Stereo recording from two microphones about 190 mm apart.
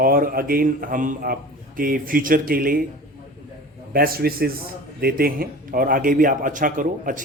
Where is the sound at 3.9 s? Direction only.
50° right (ahead or behind).